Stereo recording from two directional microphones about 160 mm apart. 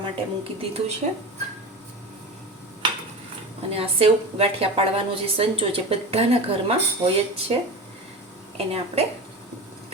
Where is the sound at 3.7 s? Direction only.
40° right (ahead or behind).